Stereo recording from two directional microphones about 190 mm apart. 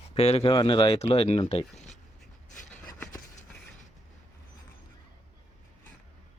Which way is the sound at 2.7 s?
10° left (ahead or behind).